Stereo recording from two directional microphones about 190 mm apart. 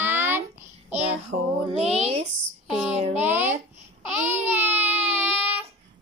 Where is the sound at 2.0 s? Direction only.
30° right (ahead or behind).